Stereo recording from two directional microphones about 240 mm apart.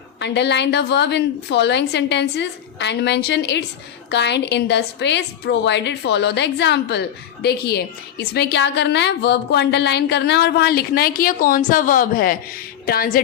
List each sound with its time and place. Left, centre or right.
0.2 s a woman's voice: left